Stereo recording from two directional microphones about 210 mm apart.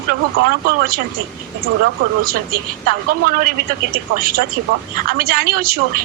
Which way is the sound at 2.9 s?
45° right (ahead or behind).